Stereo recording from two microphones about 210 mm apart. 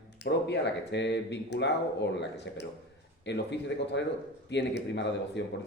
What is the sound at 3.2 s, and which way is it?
A man's voice, 55° left (ahead or behind).